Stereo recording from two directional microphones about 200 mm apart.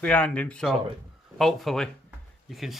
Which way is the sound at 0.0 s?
5° left (ahead or behind).